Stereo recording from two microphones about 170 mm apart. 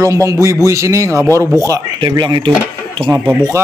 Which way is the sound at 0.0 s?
20° right (ahead or behind).